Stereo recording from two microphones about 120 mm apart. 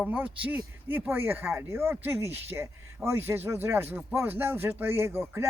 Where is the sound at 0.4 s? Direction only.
15° right (ahead or behind).